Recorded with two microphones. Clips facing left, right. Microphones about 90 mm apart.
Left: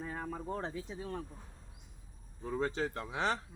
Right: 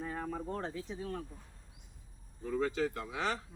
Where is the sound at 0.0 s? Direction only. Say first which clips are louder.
Right 2 dB; 5° left (ahead or behind).